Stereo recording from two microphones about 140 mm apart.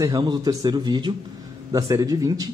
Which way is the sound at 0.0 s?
30° right (ahead or behind).